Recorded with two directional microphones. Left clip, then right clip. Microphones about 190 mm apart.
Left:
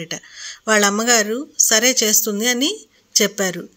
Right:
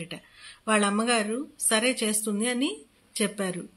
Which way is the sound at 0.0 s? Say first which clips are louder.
Left 11 dB; 30° left (ahead or behind).